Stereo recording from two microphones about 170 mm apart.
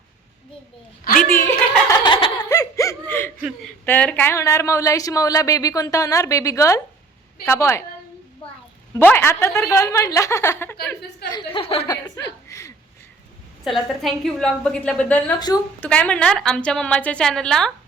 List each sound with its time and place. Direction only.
1.2 s a sound: 15° left (ahead or behind)
1.9 s a sound: 30° left (ahead or behind)
2.5 s laughter: 20° left (ahead or behind)
3.8 s a woman's voice: 10° left (ahead or behind)
9.0 s a woman's voice: 10° left (ahead or behind)
11.3 s a woman's voice: 30° left (ahead or behind)
12.5 s a sound: 15° left (ahead or behind)
13.7 s a woman's voice: centre (ahead or behind)
15.4 s speech: 25° left (ahead or behind)
15.8 s a woman's voice: 10° left (ahead or behind)